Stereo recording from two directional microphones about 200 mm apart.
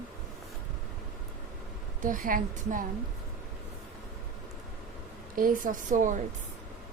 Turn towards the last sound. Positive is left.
turn(degrees=-40)  # may be behind; listen again after turning